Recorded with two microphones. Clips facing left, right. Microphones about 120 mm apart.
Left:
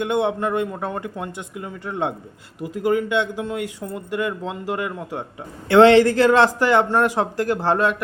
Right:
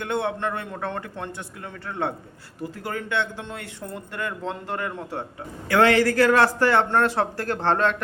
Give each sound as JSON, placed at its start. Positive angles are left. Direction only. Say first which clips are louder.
{"t": 0.0, "sound": "speech", "louder": "left 5 dB", "side_deg": 15}
{"t": 5.6, "sound": "speech", "louder": "left 7 dB", "side_deg": 25}